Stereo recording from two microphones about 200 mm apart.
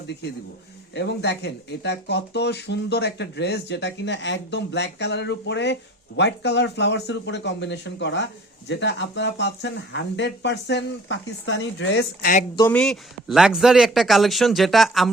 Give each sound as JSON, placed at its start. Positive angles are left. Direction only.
{"t": 0.9, "sound": "speech", "side_deg": 60}
{"t": 12.5, "sound": "speech", "side_deg": 10}